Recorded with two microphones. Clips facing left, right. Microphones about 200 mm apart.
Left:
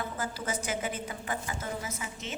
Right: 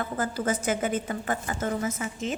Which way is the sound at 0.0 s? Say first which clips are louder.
Right 7 dB; 55° right (ahead or behind).